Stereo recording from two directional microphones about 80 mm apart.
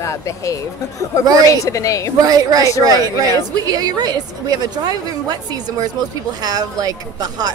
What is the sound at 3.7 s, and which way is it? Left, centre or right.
A woman's voice, right.